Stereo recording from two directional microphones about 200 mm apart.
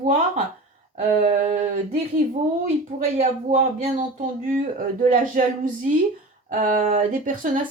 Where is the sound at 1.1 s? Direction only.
35° right (ahead or behind).